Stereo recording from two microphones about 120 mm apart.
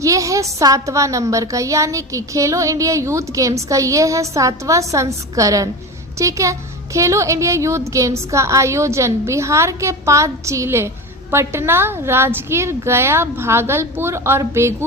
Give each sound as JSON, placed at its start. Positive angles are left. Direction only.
{"t": 0.0, "sound": "a woman's voice", "side_deg": -25}